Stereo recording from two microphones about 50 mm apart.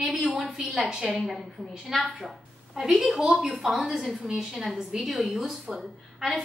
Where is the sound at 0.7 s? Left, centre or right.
Centre.